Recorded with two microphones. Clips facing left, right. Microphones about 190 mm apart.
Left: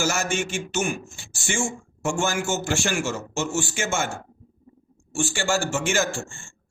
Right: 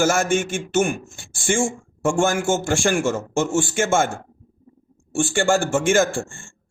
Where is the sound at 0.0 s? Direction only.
50° right (ahead or behind).